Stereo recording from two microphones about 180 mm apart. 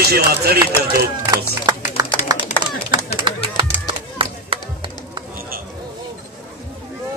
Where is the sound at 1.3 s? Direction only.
20° right (ahead or behind).